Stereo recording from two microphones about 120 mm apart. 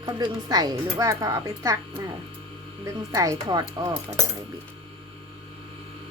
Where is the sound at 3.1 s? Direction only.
30° right (ahead or behind).